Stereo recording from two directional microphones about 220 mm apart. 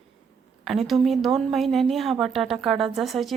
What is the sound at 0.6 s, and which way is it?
A woman's voice, centre (ahead or behind).